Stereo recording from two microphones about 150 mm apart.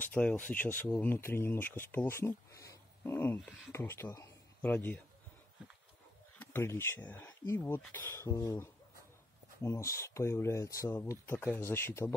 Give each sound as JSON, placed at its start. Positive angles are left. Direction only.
{"t": 0.0, "sound": "speech", "side_deg": 10}
{"t": 6.4, "sound": "speech", "side_deg": 15}